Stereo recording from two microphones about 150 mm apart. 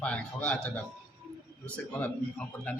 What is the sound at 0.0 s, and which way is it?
A man's voice, 10° left (ahead or behind).